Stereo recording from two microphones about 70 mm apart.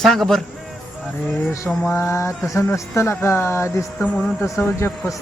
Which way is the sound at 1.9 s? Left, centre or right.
Left.